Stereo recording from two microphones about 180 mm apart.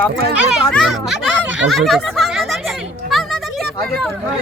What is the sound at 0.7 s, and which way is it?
Speech, centre (ahead or behind).